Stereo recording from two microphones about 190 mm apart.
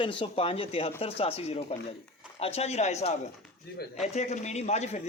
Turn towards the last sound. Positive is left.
turn(degrees=35)  # may be behind; listen again after turning